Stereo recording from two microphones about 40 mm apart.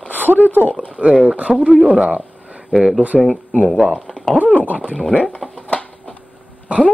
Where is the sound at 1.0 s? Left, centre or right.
Right.